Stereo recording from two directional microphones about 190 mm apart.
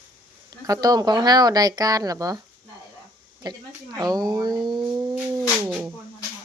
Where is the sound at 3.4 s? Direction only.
20° right (ahead or behind).